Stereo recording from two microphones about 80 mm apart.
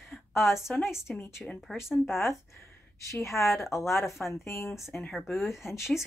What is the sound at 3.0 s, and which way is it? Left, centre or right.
A woman's voice, left.